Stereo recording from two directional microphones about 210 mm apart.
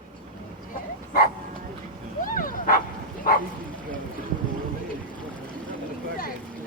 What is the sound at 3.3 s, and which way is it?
Bow-wow, 40° left (ahead or behind).